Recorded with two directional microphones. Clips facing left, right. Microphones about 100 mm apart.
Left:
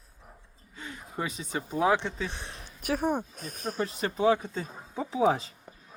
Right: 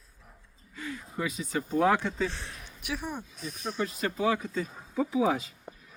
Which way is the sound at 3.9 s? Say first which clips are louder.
Left 4 dB; 25° left (ahead or behind).